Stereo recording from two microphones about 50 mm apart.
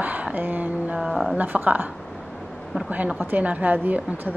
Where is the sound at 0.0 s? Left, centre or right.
Right.